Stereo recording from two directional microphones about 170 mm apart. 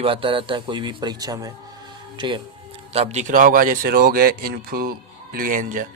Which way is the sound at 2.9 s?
40° right (ahead or behind).